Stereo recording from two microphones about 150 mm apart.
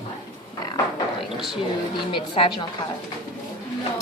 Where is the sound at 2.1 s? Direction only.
35° left (ahead or behind).